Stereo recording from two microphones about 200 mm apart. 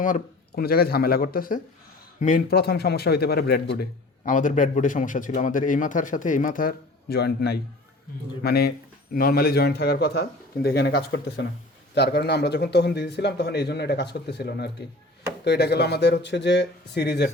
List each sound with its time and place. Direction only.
0.0 s a man's voice: 45° left (ahead or behind)
4.3 s a man's voice: 40° left (ahead or behind); by 17.2 s 55° left (ahead or behind)